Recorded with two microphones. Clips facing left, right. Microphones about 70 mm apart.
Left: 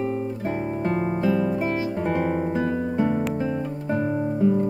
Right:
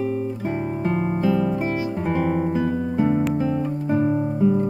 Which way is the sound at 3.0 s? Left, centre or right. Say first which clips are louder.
Right 4 dB; centre.